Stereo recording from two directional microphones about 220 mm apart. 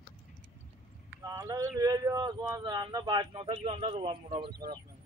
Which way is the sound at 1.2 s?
15° right (ahead or behind).